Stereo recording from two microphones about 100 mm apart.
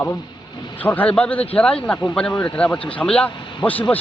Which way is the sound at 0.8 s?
15° left (ahead or behind).